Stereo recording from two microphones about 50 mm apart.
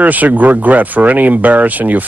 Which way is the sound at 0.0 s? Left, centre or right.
Right.